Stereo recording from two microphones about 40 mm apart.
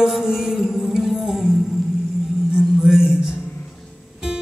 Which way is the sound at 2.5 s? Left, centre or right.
Centre.